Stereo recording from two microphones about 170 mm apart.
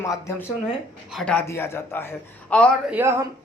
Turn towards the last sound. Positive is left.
turn(degrees=-15)  # may be behind; listen again after turning